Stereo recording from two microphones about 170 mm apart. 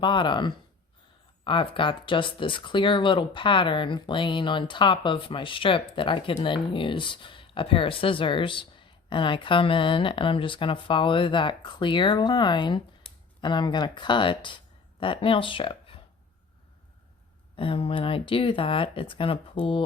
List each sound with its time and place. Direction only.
0.0 s speech: 25° left (ahead or behind)
17.6 s speech: 30° left (ahead or behind)